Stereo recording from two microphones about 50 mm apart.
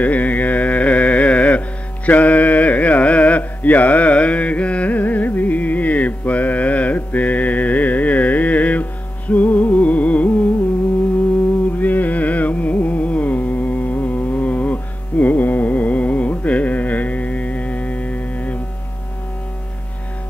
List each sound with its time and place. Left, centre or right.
0.0 s carnatic music: left
9.3 s music: left
11.8 s carnatic music: left